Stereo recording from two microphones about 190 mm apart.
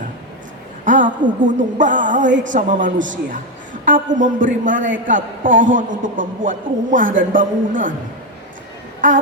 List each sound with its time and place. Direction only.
0.9 s a man's voice: 40° right (ahead or behind)